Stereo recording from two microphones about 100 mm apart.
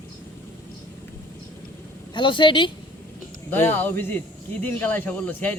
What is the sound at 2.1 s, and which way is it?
Speech, 55° left (ahead or behind).